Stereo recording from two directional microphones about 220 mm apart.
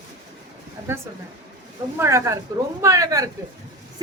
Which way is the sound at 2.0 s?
10° right (ahead or behind).